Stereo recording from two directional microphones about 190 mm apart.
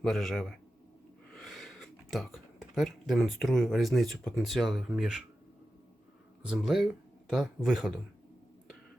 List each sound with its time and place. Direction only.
0.0 s speech: centre (ahead or behind)
6.4 s speech: 5° right (ahead or behind)